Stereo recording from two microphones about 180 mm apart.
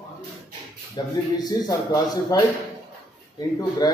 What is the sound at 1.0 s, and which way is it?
Speech, 25° left (ahead or behind).